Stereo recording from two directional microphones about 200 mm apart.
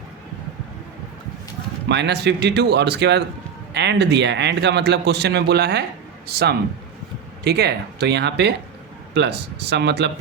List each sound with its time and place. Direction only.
1.9 s a man's voice: 60° right (ahead or behind)